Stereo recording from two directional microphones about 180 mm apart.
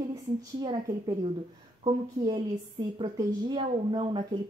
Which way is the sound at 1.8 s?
25° right (ahead or behind).